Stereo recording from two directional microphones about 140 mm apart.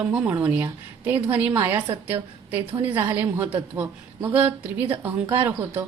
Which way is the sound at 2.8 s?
15° right (ahead or behind).